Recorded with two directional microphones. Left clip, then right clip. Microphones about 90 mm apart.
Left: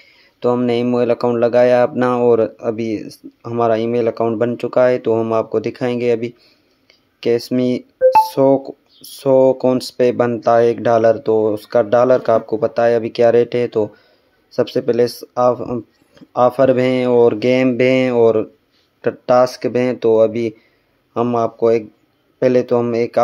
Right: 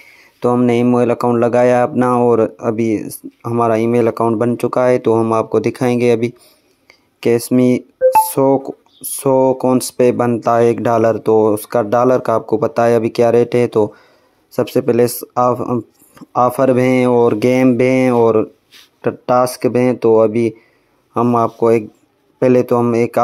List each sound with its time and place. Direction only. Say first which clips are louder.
0.2 s a sound: right 1 dB; 35° right (ahead or behind)
0.9 s speech: right 2 dB; 35° right (ahead or behind)
6.9 s a sound: right 2 dB; 40° right (ahead or behind)
8.3 s speech: even; 40° right (ahead or behind)
15.6 s speech: right 4 dB; 25° right (ahead or behind)
16.3 s speech: even; 40° right (ahead or behind)
17.4 s speech: right 2 dB; 40° right (ahead or behind)
18.9 s speech: left 1 dB; 40° right (ahead or behind)
21.1 s speech: right 3 dB; 25° right (ahead or behind)
21.4 s speech: right 1 dB; 45° right (ahead or behind)